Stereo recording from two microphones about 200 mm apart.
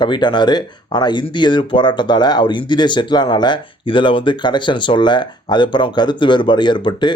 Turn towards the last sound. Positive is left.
turn(degrees=25)  # may be behind; listen again after turning